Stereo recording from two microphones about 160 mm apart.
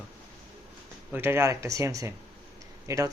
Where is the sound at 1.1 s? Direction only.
15° right (ahead or behind).